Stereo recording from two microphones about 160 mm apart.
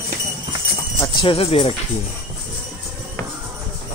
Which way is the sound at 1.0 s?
30° left (ahead or behind).